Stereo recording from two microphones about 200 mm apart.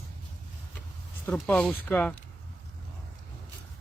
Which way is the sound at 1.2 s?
5° left (ahead or behind).